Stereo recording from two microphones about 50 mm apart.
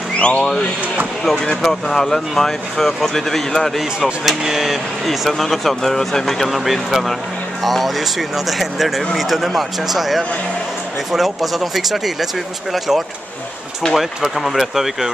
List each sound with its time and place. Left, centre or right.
0.2 s speech: left
1.6 s speech: centre
4.3 s speech: centre